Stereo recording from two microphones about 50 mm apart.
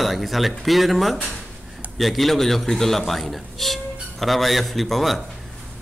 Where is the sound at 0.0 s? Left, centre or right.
Centre.